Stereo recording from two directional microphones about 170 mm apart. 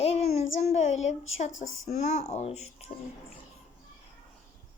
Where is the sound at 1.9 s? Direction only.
40° left (ahead or behind).